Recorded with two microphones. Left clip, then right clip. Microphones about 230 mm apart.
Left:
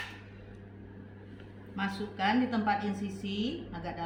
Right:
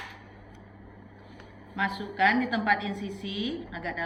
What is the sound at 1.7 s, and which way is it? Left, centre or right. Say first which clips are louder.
A woman's voice: right 6 dB; left.